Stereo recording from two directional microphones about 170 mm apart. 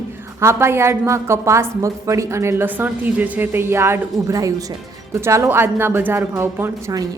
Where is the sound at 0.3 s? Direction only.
15° right (ahead or behind).